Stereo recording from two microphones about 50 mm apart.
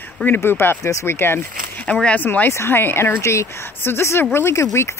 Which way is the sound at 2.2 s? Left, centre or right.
Left.